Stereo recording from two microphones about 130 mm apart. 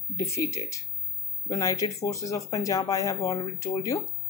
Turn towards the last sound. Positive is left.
turn(degrees=25)  # may be behind; listen again after turning